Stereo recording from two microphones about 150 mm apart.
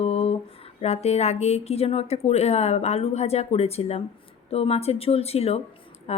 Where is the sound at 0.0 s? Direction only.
45° left (ahead or behind).